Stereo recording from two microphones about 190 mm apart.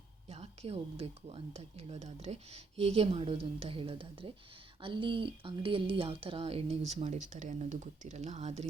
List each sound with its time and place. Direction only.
0.3 s speech: 35° right (ahead or behind)